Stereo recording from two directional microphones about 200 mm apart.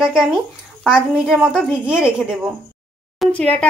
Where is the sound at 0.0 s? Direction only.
Centre (ahead or behind).